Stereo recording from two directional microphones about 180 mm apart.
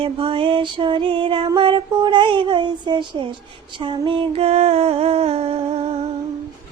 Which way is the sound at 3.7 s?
25° right (ahead or behind).